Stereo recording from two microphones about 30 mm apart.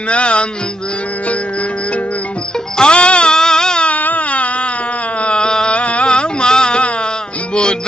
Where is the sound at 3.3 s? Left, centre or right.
Left.